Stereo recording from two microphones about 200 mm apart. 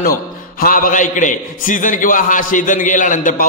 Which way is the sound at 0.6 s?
45° left (ahead or behind).